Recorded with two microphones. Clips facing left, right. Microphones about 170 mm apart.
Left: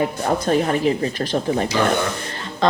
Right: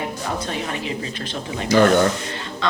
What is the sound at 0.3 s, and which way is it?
A woman's voice, 50° left (ahead or behind).